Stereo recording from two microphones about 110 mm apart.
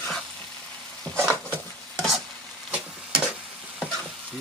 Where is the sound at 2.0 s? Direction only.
Centre (ahead or behind).